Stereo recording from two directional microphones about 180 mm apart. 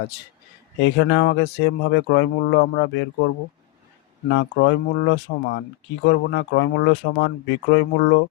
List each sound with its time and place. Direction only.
0.8 s speech: 80° left
4.3 s speech: 75° left (ahead or behind)